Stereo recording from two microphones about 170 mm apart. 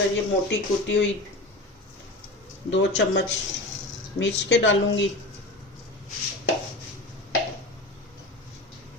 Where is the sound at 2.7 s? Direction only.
90° left.